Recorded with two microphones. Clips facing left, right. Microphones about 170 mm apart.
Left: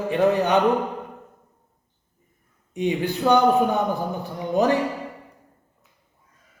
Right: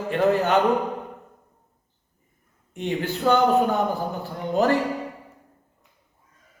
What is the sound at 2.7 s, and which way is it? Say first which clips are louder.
Speech: left 3 dB; 15° left (ahead or behind).